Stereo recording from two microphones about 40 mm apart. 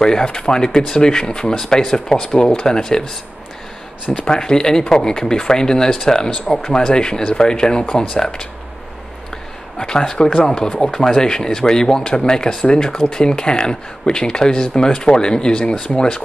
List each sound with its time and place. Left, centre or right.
0.0 s speech: centre
4.1 s speech: left
4.4 s speech: centre
9.8 s speech: centre